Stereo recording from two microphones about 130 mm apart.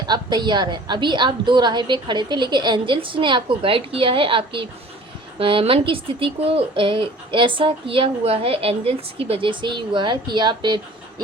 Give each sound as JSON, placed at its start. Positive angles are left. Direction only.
{"t": 0.0, "sound": "speech", "side_deg": -35}